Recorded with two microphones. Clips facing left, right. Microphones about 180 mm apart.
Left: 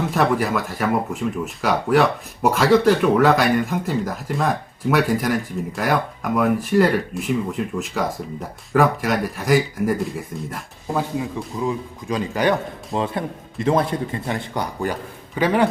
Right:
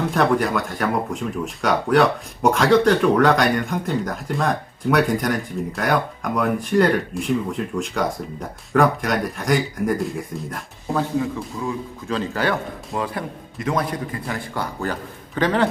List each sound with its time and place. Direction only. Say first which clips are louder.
0.0 s speech: right 1 dB; 5° left (ahead or behind)
11.6 s a man's voice: left 5 dB; 15° left (ahead or behind)